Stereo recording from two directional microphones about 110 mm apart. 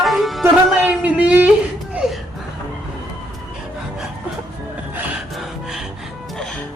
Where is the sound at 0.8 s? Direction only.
10° right (ahead or behind).